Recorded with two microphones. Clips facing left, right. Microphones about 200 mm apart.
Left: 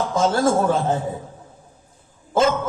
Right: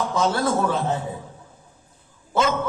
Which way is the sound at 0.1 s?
45° left (ahead or behind).